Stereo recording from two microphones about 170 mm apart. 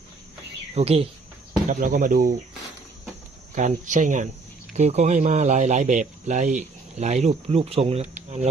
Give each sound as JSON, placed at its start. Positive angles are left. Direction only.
{"t": 0.7, "sound": "speech", "side_deg": -35}
{"t": 1.6, "sound": "speech", "side_deg": -50}
{"t": 3.5, "sound": "speech", "side_deg": -45}